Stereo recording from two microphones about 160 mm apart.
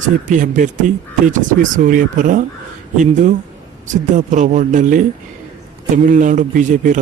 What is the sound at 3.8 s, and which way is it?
A man's voice, 50° right (ahead or behind).